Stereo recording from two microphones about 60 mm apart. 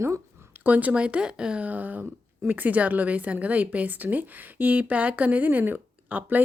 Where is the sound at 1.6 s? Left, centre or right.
Right.